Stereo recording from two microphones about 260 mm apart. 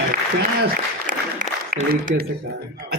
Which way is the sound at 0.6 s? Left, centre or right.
Right.